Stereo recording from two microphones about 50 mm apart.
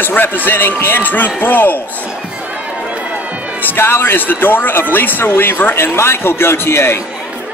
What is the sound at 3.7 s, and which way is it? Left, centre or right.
A man's voice, left.